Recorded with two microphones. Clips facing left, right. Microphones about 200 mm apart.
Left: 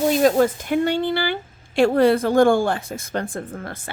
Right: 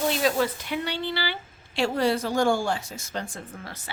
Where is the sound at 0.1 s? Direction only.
45° left (ahead or behind).